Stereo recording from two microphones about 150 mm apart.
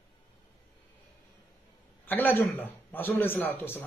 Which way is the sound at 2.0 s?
15° left (ahead or behind).